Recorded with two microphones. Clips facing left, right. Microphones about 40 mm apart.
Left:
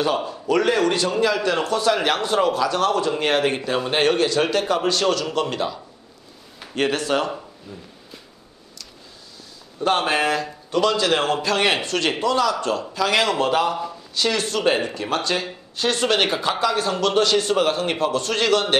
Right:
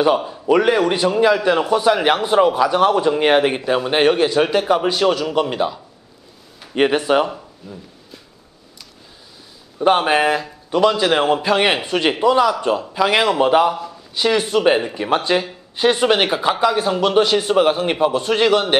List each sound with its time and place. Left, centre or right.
0.2 s a man's voice: centre
7.7 s speech: centre
9.8 s a man's voice: centre